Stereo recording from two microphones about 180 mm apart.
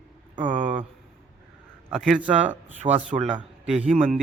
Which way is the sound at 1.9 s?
Centre (ahead or behind).